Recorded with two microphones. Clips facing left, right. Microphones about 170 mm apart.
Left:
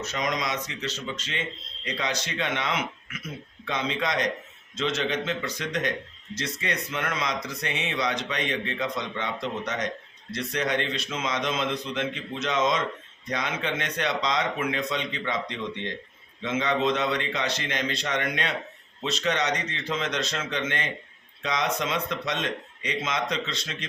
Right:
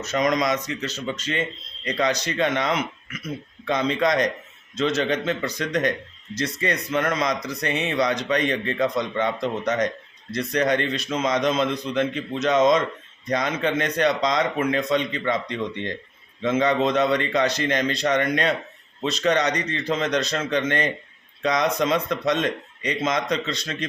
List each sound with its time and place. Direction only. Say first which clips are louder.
0.0 s speech: right 7 dB; 45° right (ahead or behind)